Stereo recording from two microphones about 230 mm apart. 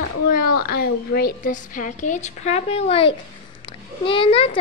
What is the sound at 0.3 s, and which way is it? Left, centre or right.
A woman's voice, left.